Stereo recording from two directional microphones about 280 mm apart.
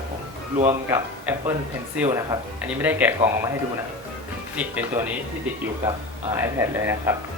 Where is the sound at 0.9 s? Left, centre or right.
Centre.